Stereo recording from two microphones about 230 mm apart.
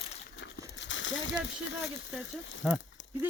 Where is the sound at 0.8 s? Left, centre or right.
Left.